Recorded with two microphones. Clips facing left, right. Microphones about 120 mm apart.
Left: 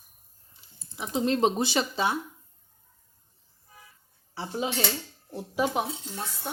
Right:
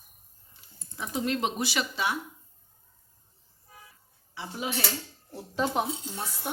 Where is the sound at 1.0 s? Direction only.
25° left (ahead or behind).